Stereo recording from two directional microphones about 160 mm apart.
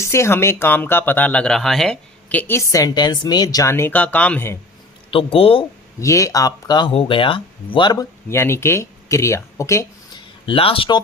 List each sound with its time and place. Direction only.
0.0 s speech: 15° left (ahead or behind)
5.1 s speech: 35° left (ahead or behind)
6.0 s speech: 20° left (ahead or behind)
8.3 s speech: 15° left (ahead or behind)
10.4 s speech: 35° left (ahead or behind)